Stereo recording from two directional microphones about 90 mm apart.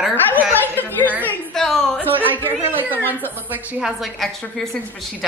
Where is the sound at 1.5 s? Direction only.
5° left (ahead or behind).